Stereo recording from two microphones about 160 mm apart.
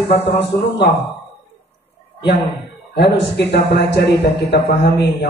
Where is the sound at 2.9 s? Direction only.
90° left.